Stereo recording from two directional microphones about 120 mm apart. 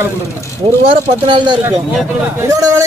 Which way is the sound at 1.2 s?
40° right (ahead or behind).